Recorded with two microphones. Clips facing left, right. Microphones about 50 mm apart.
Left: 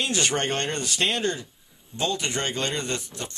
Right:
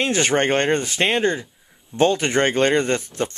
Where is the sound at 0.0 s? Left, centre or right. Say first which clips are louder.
Right 6 dB; right.